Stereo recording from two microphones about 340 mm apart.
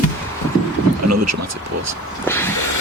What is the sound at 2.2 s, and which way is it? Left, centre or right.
Vehicle, centre.